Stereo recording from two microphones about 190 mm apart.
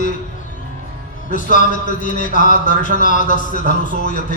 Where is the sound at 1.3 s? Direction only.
45° left (ahead or behind).